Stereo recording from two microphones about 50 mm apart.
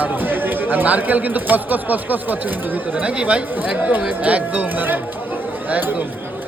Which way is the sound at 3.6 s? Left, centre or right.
Right.